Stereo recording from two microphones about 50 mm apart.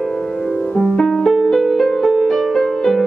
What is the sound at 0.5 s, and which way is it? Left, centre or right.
Music, centre.